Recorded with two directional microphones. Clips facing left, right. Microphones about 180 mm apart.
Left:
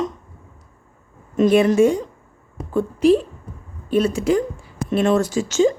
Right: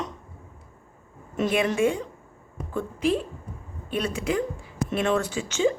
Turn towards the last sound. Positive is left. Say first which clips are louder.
# left 7 dB
turn(degrees=40)  # may be behind; listen again after turning